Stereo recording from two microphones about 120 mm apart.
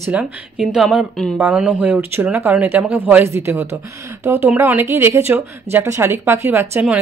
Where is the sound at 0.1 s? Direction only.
10° right (ahead or behind).